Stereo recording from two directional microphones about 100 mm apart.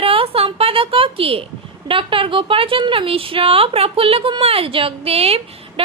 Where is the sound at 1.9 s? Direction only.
60° right (ahead or behind).